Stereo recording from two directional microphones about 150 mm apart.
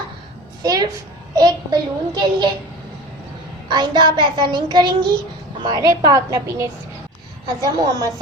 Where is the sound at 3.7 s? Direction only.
30° right (ahead or behind).